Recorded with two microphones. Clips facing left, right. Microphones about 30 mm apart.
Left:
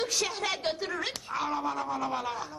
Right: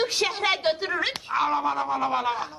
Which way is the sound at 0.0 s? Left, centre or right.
Right.